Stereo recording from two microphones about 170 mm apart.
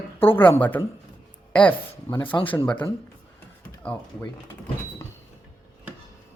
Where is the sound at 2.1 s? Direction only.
30° left (ahead or behind).